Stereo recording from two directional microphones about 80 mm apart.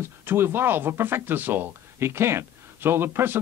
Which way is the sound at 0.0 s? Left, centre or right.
Right.